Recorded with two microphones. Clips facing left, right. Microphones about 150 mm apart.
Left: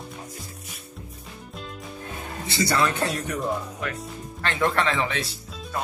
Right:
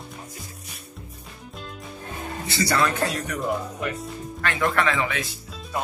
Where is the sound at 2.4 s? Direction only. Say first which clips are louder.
Even; 20° left (ahead or behind).